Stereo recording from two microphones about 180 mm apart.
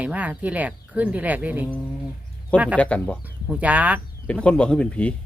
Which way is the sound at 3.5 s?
10° right (ahead or behind).